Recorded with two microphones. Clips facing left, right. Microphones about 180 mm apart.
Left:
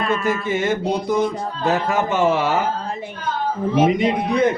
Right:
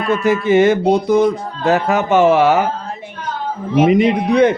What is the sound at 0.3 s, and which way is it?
Speech, 80° right.